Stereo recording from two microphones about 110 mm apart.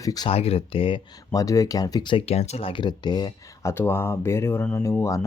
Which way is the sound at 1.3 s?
30° left (ahead or behind).